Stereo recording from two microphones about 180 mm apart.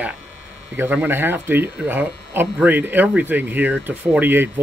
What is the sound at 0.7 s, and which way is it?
Speech, 10° right (ahead or behind).